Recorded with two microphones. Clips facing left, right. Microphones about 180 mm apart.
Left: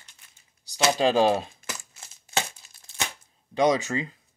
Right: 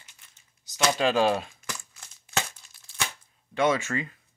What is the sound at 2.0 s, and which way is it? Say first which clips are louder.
Tearing: left 2 dB; 30° left (ahead or behind).